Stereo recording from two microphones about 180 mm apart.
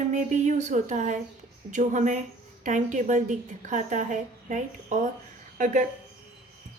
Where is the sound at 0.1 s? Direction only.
40° right (ahead or behind).